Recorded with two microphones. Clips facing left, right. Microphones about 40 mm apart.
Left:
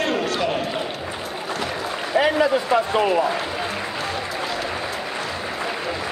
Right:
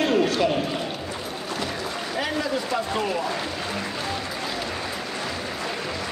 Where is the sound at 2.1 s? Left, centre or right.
Left.